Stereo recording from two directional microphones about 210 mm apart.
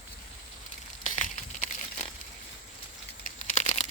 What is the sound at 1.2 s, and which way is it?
Crumpling, 35° left (ahead or behind).